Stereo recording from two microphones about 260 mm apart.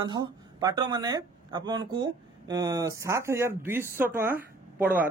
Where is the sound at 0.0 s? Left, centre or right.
Centre.